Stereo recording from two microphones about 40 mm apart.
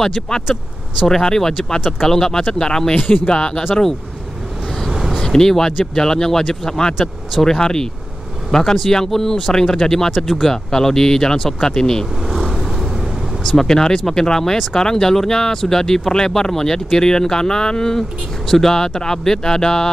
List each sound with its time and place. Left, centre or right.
1.0 s speech: centre
4.8 s a sound: centre
5.2 s speech: centre
12.4 s vehicle: centre
13.5 s speech: centre